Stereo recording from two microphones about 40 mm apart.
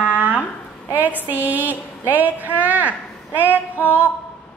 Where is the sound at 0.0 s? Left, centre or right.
Right.